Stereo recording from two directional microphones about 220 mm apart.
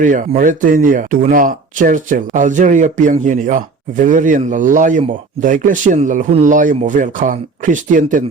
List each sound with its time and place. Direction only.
0.0 s speech: 35° right (ahead or behind)